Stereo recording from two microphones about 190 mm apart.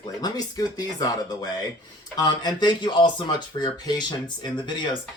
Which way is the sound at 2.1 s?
20° left (ahead or behind).